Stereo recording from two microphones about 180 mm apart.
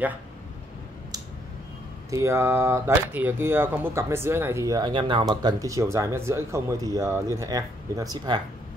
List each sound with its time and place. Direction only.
2.0 s speech: 15° right (ahead or behind)